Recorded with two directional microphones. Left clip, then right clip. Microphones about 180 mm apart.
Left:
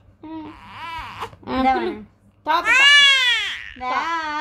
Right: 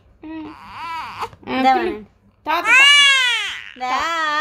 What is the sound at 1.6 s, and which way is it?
Speech, 65° right (ahead or behind).